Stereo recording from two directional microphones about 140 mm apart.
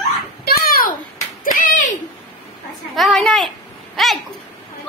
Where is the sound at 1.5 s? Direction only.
70° left (ahead or behind).